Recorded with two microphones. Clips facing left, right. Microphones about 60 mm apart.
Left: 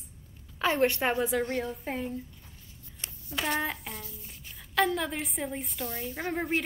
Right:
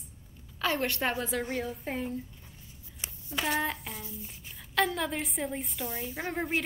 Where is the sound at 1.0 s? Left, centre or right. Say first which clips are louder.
Left 3 dB; centre.